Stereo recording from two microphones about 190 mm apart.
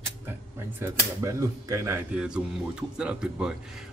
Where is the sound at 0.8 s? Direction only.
15° right (ahead or behind).